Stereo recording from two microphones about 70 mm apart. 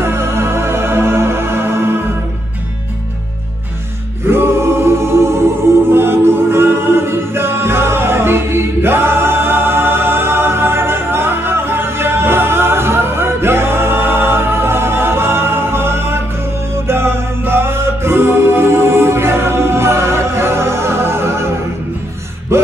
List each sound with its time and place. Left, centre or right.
0.0 s music: right
4.3 s choir: right
5.9 s music: right
22.5 s a sound: right